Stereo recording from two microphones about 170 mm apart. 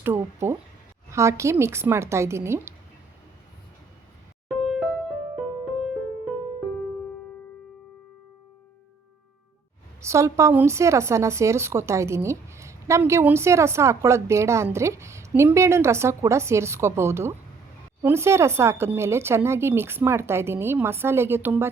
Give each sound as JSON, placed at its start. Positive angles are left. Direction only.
{"t": 0.0, "sound": "a woman's voice", "side_deg": -15}
{"t": 4.6, "sound": "music", "side_deg": 0}
{"t": 10.0, "sound": "a woman's voice", "side_deg": -15}